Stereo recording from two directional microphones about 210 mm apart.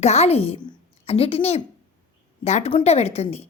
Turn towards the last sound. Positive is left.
turn(degrees=30)  # may be behind; listen again after turning